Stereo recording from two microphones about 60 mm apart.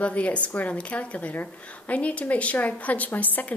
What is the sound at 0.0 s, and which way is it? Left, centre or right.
A woman's voice, left.